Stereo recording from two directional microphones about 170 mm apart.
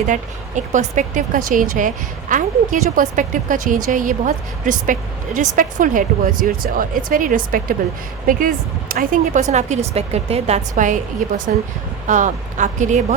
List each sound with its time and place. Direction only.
0.1 s a woman's voice: 45° right (ahead or behind)